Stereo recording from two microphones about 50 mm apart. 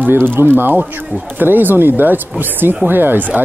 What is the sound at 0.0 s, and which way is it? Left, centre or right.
Speech, right.